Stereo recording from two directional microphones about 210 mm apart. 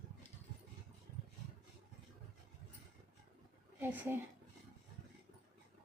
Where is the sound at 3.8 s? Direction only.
10° right (ahead or behind).